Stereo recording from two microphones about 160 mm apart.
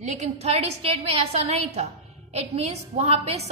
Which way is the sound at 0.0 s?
45° right (ahead or behind).